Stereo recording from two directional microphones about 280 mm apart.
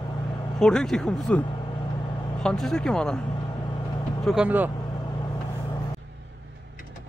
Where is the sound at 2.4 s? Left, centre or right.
Centre.